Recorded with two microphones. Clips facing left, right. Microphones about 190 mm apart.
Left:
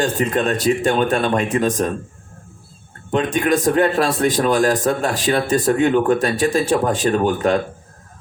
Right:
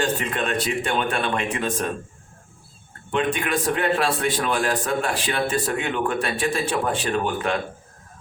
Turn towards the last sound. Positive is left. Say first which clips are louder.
# left 7 dB
turn(degrees=40)  # may be behind; listen again after turning